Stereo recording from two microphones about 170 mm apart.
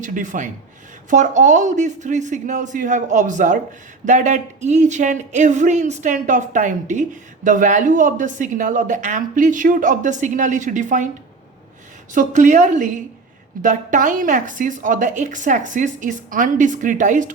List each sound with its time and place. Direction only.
0.0 s a woman's voice: 50° right (ahead or behind)
12.1 s a woman's voice: 45° right (ahead or behind)